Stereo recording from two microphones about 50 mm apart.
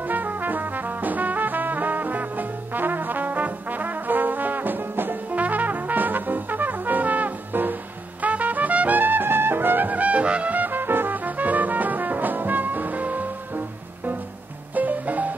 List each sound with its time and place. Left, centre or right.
0.0 s music: right
8.2 s trumpet: right
14.7 s music: right